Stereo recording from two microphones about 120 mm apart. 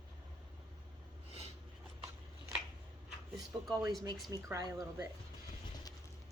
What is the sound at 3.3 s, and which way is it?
Speech, centre (ahead or behind).